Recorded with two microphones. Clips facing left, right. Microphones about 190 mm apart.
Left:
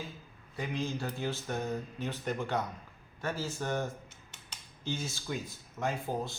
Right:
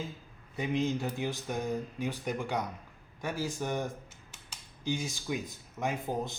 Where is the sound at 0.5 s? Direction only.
20° right (ahead or behind).